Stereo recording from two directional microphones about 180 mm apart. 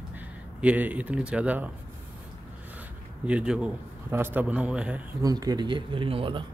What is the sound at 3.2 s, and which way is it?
A man's voice, 5° right (ahead or behind).